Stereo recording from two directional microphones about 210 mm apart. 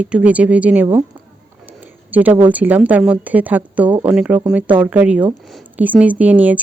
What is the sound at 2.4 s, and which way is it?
Speech, 5° right (ahead or behind).